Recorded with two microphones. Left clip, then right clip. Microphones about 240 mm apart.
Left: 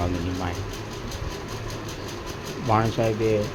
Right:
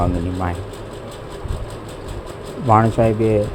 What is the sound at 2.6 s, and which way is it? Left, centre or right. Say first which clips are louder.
Speech: right 8 dB; right.